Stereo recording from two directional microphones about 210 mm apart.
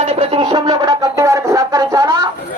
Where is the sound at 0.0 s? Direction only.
30° right (ahead or behind).